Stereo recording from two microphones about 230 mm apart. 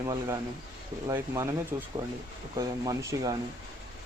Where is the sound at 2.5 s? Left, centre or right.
Centre.